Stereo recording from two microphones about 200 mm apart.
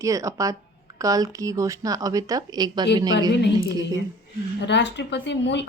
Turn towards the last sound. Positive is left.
turn(degrees=60)  # may be behind; listen again after turning